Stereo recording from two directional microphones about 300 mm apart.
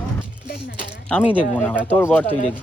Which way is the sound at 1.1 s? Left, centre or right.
Centre.